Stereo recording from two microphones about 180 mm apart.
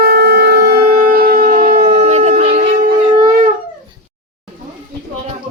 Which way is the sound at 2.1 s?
35° right (ahead or behind).